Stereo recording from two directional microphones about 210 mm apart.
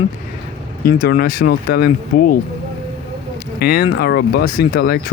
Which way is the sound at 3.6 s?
50° left (ahead or behind).